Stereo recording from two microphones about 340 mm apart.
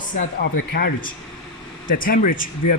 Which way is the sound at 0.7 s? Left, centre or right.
Left.